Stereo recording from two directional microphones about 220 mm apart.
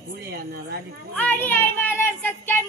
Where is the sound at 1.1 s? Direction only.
10° left (ahead or behind).